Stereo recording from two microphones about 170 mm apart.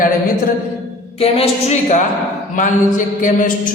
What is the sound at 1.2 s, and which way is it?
Speech, 40° left (ahead or behind).